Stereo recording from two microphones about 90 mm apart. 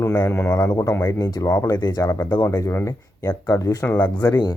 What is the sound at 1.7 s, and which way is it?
Speech, 50° left (ahead or behind).